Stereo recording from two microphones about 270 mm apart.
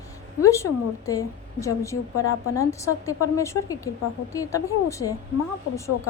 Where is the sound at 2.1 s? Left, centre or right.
Left.